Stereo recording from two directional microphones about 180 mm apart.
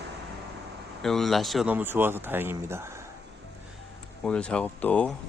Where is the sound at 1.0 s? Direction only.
Centre (ahead or behind).